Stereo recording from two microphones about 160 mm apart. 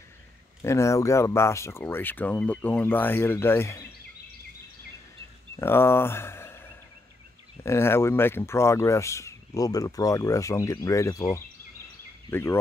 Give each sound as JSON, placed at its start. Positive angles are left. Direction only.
{"t": 0.6, "sound": "speech", "side_deg": 20}
{"t": 5.6, "sound": "speech", "side_deg": 15}